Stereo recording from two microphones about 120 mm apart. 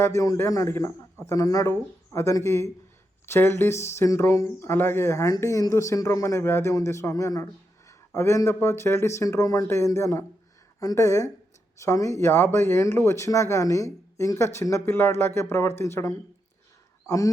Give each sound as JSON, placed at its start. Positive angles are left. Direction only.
{"t": 0.0, "sound": "speech", "side_deg": 25}
{"t": 7.9, "sound": "a sound", "side_deg": 25}
{"t": 8.5, "sound": "speech", "side_deg": 20}